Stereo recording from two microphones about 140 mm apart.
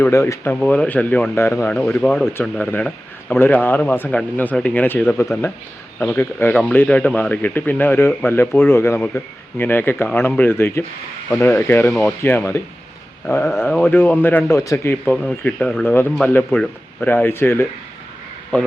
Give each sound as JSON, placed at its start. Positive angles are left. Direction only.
{"t": 0.0, "sound": "speech", "side_deg": 20}
{"t": 1.7, "sound": "speech", "side_deg": 5}